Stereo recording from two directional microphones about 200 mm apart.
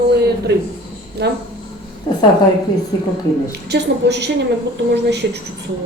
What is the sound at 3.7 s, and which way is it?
Speech, 60° right (ahead or behind).